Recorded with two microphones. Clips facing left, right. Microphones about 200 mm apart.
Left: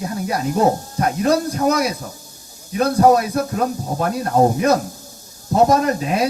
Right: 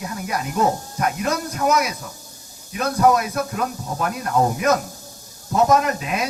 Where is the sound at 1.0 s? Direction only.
35° left (ahead or behind).